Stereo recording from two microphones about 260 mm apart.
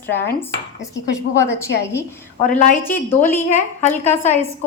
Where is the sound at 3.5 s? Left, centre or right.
Left.